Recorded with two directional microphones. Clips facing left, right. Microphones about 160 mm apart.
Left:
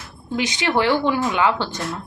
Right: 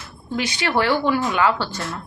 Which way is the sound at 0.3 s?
20° left (ahead or behind).